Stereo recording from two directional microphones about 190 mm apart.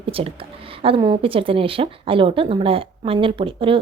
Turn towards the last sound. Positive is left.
turn(degrees=-25)  # may be behind; listen again after turning